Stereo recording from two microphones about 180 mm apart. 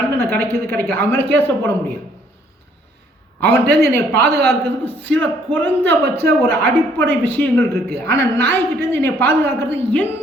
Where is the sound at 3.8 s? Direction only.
15° left (ahead or behind).